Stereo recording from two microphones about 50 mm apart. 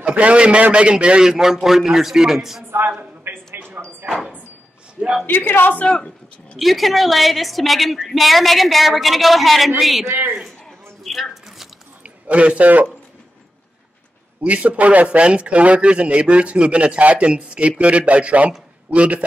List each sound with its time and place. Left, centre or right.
0.0 s a man's voice: right; by 2.6 s centre
3.0 s a sound: right
4.0 s speech: right
5.2 s speech: left
5.9 s speech: centre
6.6 s a woman's voice: centre
10.0 s a man's voice: right
11.1 s squish: centre
12.0 s a man's voice: right
14.4 s speech: right